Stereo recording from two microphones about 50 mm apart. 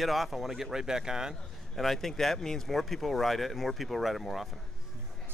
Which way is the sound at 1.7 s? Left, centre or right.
Centre.